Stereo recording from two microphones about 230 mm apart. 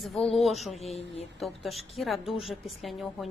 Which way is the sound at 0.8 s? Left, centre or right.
Left.